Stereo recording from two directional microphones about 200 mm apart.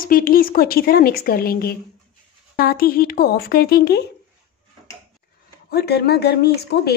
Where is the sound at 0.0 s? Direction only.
45° left (ahead or behind).